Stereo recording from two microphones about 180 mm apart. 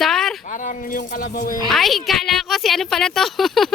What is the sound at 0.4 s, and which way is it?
Speech, 45° left (ahead or behind).